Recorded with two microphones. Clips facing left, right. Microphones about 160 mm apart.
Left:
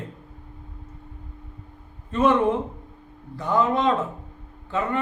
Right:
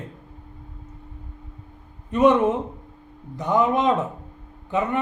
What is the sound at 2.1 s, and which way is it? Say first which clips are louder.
A man's voice: right 2 dB; 20° right (ahead or behind).